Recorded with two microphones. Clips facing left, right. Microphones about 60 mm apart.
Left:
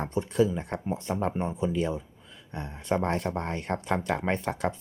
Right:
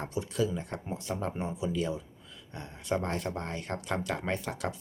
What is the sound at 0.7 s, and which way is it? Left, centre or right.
Speech, left.